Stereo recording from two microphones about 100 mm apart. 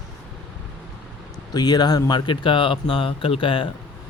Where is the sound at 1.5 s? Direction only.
45° left (ahead or behind).